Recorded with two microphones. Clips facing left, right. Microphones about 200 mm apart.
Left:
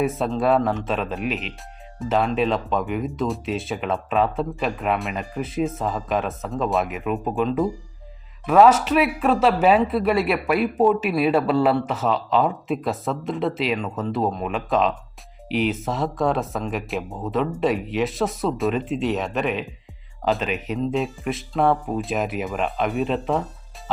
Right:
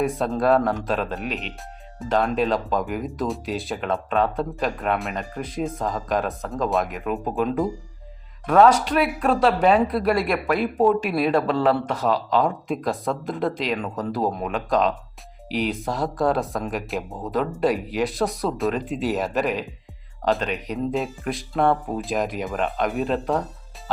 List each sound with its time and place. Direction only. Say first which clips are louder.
0.0 s speech: even; 5° left (ahead or behind)